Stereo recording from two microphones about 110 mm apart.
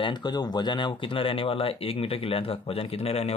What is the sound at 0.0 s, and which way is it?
Speech, 40° left (ahead or behind).